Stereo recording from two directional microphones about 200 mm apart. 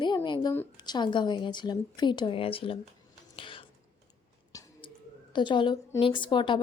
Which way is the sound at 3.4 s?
25° left (ahead or behind).